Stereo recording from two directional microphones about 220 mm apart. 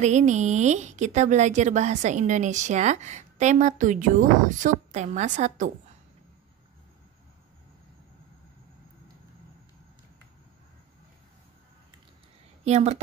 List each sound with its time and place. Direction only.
0.0 s a woman's voice: 30° right (ahead or behind)
12.6 s a woman's voice: 30° right (ahead or behind)